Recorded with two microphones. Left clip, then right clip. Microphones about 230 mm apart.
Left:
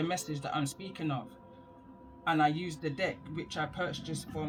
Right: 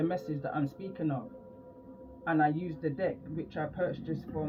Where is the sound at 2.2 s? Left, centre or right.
Left.